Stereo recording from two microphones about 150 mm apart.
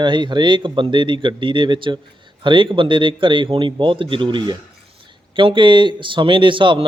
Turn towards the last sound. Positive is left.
turn(degrees=-35)  # may be behind; listen again after turning